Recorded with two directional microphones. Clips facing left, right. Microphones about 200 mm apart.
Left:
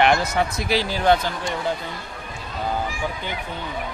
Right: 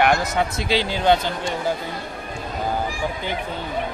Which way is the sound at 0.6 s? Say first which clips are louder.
Right 1 dB; 25° right (ahead or behind).